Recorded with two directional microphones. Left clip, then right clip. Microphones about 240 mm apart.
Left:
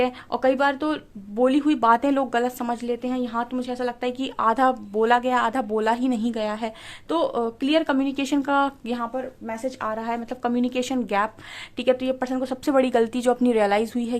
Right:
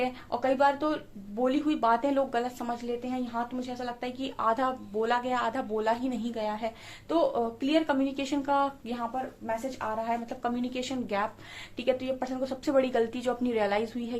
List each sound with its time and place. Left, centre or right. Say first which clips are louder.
0.0 s a woman's voice: left 7 dB; left